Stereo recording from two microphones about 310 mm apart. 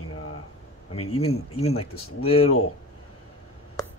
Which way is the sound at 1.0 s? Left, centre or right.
Centre.